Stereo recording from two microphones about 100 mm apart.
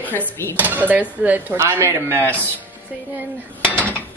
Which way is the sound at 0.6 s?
15° right (ahead or behind).